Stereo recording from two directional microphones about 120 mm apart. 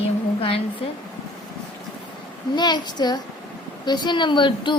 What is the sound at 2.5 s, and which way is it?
A woman's voice, 35° left (ahead or behind).